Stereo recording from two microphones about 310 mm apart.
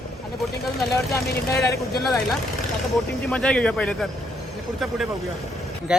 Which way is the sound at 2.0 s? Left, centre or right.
Centre.